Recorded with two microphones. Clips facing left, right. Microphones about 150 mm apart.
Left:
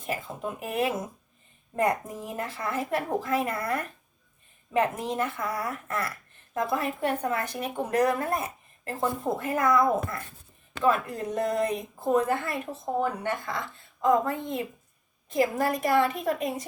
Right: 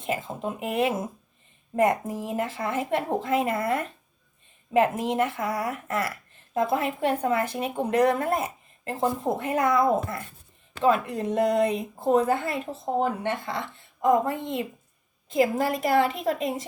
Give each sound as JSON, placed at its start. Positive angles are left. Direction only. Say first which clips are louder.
{"t": 0.0, "sound": "speech", "louder": "right 3 dB", "side_deg": -25}